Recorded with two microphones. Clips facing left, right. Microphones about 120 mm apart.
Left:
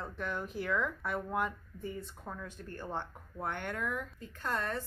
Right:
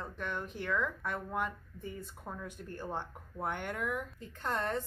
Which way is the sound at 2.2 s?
15° right (ahead or behind).